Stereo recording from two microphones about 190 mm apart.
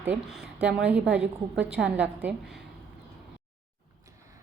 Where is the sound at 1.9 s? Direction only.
10° right (ahead or behind).